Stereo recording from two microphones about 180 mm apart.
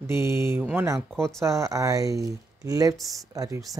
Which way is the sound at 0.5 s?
10° right (ahead or behind).